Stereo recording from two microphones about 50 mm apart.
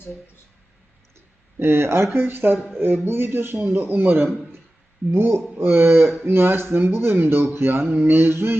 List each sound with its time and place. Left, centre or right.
1.5 s speech: right